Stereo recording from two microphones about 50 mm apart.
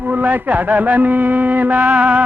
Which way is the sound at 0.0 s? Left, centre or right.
Right.